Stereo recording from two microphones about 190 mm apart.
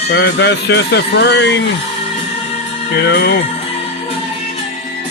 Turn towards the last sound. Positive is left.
turn(degrees=60)  # may be behind; listen again after turning